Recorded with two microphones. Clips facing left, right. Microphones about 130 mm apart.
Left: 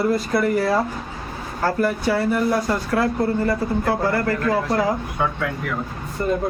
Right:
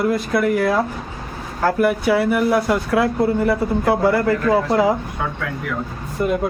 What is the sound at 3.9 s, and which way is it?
Speech, 20° right (ahead or behind).